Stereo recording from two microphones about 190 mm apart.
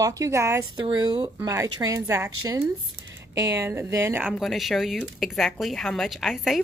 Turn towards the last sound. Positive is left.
turn(degrees=0)  # may be behind; listen again after turning